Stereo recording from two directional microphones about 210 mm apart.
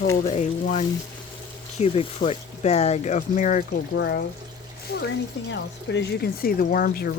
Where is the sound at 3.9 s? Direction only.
55° left (ahead or behind).